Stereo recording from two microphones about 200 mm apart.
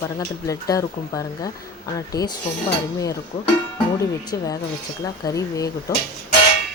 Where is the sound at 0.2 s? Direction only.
15° left (ahead or behind).